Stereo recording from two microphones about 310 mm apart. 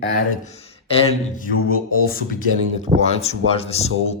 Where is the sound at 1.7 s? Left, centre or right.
Left.